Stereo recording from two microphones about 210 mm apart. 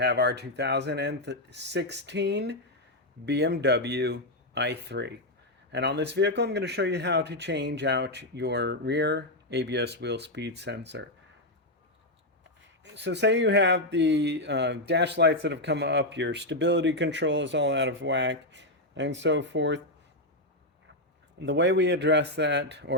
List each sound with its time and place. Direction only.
0.0 s speech: 50° right (ahead or behind)
12.8 s speech: 55° right (ahead or behind)
21.4 s speech: 60° right (ahead or behind)